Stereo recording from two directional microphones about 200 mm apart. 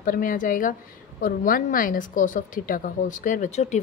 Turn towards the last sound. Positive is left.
turn(degrees=35)  # may be behind; listen again after turning